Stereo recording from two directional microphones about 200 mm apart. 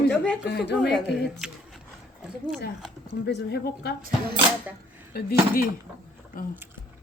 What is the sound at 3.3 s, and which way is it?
Speech, 55° left (ahead or behind).